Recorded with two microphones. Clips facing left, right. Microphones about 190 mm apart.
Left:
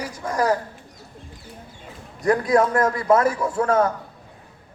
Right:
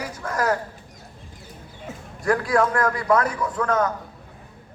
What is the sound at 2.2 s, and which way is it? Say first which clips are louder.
A man's voice: left 2 dB; 20° left (ahead or behind).